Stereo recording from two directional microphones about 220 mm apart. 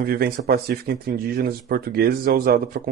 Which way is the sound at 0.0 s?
45° right (ahead or behind).